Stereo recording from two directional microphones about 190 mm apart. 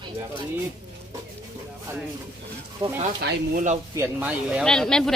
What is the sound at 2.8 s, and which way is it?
Speech, 25° right (ahead or behind).